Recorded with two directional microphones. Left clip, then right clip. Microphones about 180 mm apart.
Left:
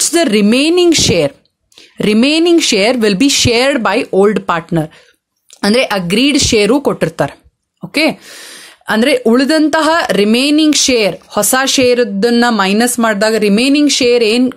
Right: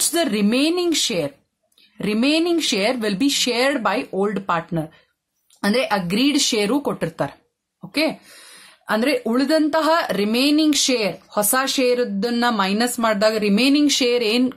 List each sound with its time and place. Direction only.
0.0 s speech: 30° left (ahead or behind)